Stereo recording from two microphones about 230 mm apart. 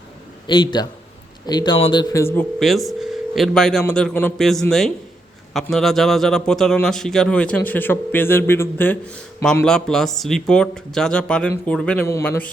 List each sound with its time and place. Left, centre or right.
0.4 s a man's voice: centre